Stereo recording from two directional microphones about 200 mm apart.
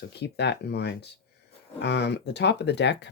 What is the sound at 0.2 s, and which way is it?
Speech, 55° left (ahead or behind).